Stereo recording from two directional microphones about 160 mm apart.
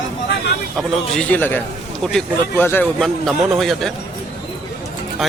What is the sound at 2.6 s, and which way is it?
Speech, 15° left (ahead or behind).